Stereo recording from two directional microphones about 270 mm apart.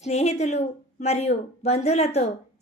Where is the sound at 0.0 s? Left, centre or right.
Left.